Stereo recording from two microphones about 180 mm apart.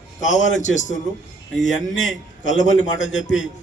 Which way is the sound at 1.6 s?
90° left.